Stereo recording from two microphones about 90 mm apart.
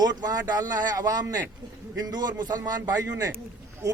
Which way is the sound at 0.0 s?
50° right (ahead or behind).